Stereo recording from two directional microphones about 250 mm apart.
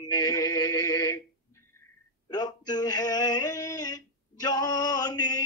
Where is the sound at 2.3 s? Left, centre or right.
Centre.